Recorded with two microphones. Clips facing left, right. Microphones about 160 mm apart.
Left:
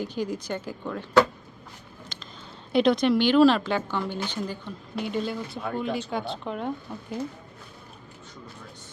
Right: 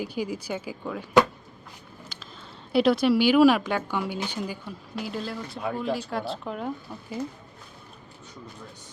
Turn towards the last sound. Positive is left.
turn(degrees=-5)  # may be behind; listen again after turning